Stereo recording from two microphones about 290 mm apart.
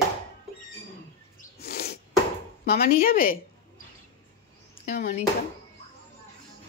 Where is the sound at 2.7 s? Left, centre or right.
Left.